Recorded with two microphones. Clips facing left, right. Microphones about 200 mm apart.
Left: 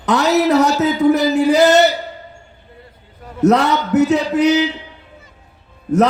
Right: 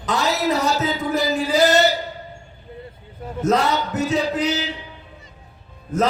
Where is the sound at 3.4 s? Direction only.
70° left (ahead or behind).